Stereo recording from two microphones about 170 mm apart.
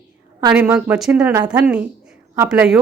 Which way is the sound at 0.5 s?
10° right (ahead or behind).